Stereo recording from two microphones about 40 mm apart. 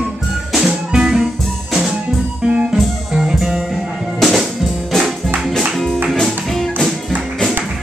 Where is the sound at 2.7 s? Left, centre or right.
Centre.